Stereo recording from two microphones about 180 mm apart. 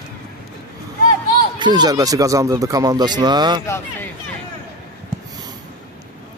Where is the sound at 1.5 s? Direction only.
25° right (ahead or behind).